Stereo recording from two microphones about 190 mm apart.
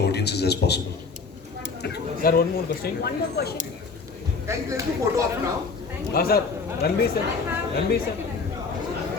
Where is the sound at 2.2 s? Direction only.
50° left (ahead or behind).